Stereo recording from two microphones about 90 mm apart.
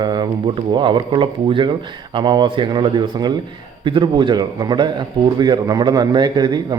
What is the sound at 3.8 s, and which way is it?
A man's voice, 65° right (ahead or behind).